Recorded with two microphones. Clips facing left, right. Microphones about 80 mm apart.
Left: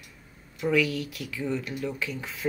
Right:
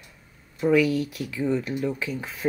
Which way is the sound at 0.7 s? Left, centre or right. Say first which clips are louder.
Right 5 dB; right.